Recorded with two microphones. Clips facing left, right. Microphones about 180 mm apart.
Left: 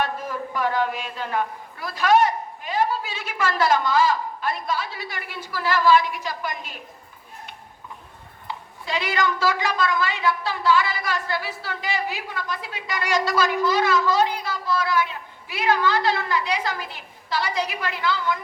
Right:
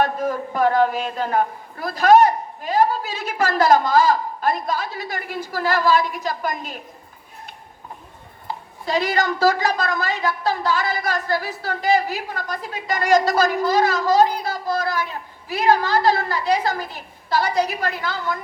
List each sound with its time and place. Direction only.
0.0 s a woman's voice: 40° right (ahead or behind)
8.4 s a woman's voice: 40° right (ahead or behind)